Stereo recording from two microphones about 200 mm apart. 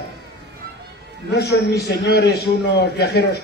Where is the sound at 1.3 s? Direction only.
55° left (ahead or behind).